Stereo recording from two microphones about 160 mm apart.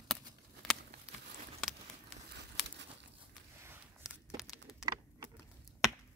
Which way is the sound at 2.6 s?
Centre (ahead or behind).